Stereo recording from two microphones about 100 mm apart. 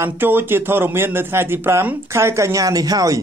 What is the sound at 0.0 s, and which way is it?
A man's voice, 20° right (ahead or behind).